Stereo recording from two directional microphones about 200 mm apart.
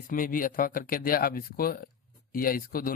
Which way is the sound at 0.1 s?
45° left (ahead or behind).